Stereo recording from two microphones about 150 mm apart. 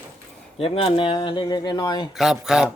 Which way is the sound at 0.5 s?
40° left (ahead or behind).